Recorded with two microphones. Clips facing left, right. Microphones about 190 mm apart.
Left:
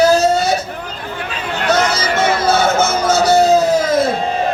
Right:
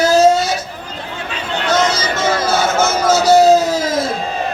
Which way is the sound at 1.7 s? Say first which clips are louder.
Left 1 dB; 60° left (ahead or behind).